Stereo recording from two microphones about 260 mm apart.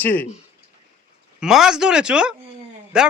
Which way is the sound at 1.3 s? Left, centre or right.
Centre.